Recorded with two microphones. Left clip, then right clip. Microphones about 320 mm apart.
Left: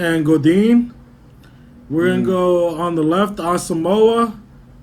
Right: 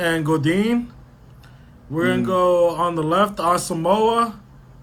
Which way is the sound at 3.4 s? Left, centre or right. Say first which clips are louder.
Right 1 dB; centre.